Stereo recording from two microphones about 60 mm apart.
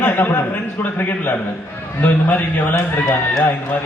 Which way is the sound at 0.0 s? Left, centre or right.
Left.